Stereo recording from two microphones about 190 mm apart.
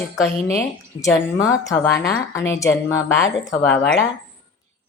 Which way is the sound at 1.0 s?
15° left (ahead or behind).